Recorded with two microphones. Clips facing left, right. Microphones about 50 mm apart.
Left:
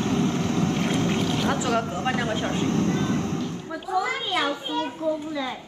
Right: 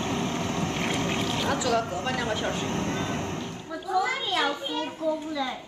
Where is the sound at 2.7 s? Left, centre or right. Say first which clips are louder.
Left 5 dB; right.